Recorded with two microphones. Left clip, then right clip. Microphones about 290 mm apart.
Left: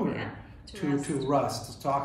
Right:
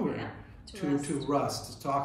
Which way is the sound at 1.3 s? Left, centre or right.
Centre.